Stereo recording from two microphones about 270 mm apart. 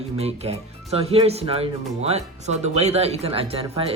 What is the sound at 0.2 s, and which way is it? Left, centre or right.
Speech, right.